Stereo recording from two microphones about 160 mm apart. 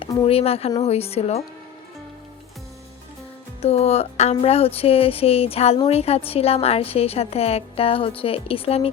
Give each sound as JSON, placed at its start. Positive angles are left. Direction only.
{"t": 0.3, "sound": "speech", "side_deg": 40}
{"t": 3.6, "sound": "speech", "side_deg": 40}